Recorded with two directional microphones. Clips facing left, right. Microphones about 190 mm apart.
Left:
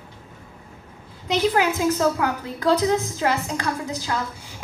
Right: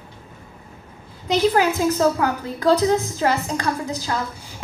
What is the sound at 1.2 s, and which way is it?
A woman's voice, 35° right (ahead or behind).